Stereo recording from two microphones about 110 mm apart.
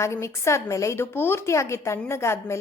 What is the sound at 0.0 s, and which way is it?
A woman's voice, 25° left (ahead or behind).